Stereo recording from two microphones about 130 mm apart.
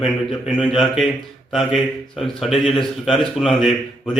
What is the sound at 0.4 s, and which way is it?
A man's voice, centre (ahead or behind).